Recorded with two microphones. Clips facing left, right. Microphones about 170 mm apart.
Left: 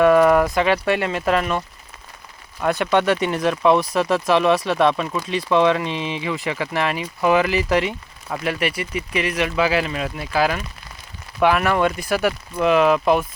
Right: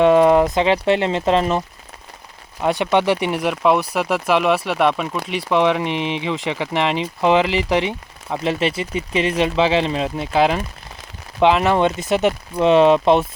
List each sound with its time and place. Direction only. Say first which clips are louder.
0.0 s speech: right 1 dB; 20° right (ahead or behind)